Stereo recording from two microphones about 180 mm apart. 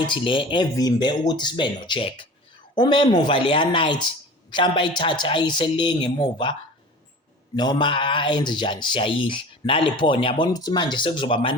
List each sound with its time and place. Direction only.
0.0 s speech: 25° left (ahead or behind)